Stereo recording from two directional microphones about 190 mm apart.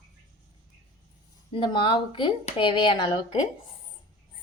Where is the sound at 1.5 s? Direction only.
25° left (ahead or behind).